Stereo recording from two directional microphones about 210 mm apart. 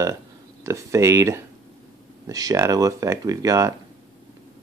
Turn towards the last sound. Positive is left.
turn(degrees=-15)  # may be behind; listen again after turning